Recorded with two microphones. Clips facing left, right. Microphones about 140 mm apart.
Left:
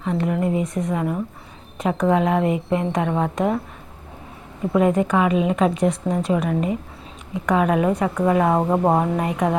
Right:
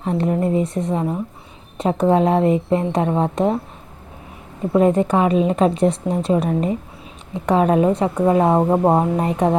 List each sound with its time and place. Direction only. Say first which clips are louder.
0.0 s a woman's voice: right 2 dB; 35° right (ahead or behind)
4.7 s a woman's voice: right 3 dB; 30° right (ahead or behind)
8.6 s a sound: right 3 dB; 15° right (ahead or behind)
9.1 s a woman's voice: right 3 dB; 30° right (ahead or behind)